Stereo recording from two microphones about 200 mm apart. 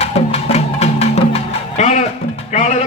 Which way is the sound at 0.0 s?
30° left (ahead or behind).